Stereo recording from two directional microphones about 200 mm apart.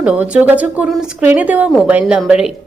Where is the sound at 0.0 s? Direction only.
5° right (ahead or behind).